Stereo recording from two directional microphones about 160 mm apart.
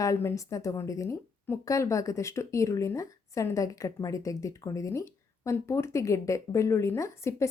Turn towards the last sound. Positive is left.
turn(degrees=20)  # may be behind; listen again after turning